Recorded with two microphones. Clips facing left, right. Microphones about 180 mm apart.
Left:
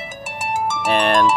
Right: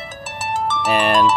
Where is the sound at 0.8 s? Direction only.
5° right (ahead or behind).